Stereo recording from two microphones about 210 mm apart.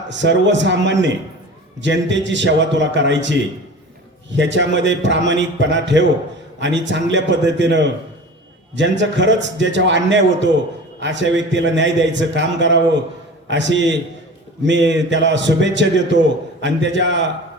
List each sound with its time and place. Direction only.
0.1 s a man's voice: 60° right (ahead or behind)